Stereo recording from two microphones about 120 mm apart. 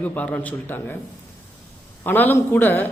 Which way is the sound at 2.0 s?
15° left (ahead or behind).